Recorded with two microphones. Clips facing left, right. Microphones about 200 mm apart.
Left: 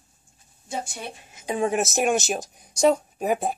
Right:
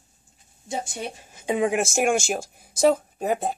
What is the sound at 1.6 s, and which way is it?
Speech, 15° right (ahead or behind).